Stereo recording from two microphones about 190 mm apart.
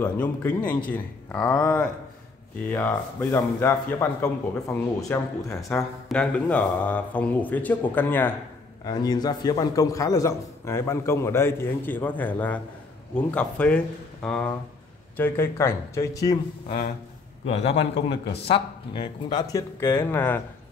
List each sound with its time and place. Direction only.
0.0 s a man's voice: 10° left (ahead or behind)
6.0 s a man's voice: 5° left (ahead or behind)
8.8 s a man's voice: 20° left (ahead or behind)
17.9 s a man's voice: 60° left (ahead or behind)
18.5 s a man's voice: 25° left (ahead or behind); by 20.4 s 10° left (ahead or behind)